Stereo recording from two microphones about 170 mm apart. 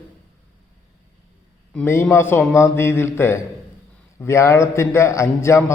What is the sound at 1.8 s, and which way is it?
A man's voice, 15° left (ahead or behind).